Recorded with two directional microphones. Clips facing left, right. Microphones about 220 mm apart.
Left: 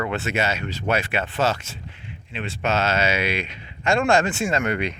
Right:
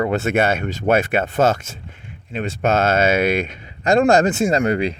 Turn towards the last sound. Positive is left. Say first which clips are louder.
# right 6 dB
turn(degrees=-35)  # may be behind; listen again after turning